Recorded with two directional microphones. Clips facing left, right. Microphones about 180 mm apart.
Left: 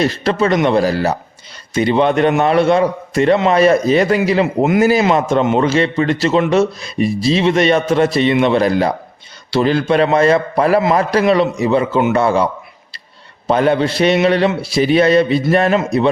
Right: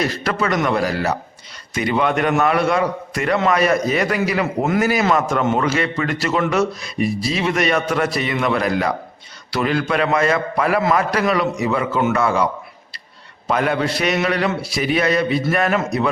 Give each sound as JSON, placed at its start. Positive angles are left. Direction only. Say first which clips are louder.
{"t": 0.0, "sound": "a man's voice", "louder": "left 6 dB", "side_deg": 25}
{"t": 13.5, "sound": "a man's voice", "louder": "left 5 dB", "side_deg": 30}